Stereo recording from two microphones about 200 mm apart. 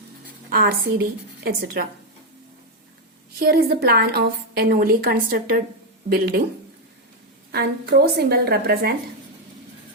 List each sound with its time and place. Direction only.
0.5 s a woman's voice: 45° right (ahead or behind)
3.3 s a woman's voice: 50° right (ahead or behind)
7.5 s a woman's voice: 55° right (ahead or behind)